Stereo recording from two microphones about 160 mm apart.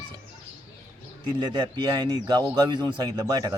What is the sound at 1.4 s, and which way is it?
Speech, 25° right (ahead or behind).